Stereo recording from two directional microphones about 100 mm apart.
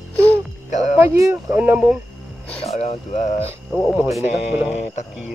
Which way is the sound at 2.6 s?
90° left.